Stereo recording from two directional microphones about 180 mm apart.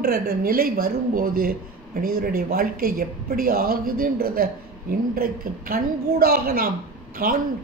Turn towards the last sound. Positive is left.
turn(degrees=-50)  # may be behind; listen again after turning